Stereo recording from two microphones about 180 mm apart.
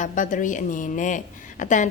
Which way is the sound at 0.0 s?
45° left (ahead or behind).